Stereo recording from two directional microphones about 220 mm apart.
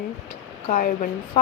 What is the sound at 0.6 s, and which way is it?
Speech, 35° left (ahead or behind).